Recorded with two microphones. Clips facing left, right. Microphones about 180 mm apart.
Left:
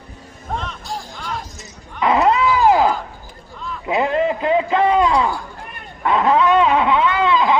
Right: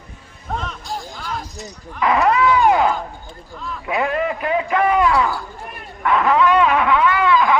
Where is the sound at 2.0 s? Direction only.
25° left (ahead or behind).